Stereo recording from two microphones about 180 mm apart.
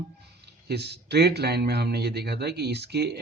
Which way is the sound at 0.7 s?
65° right (ahead or behind).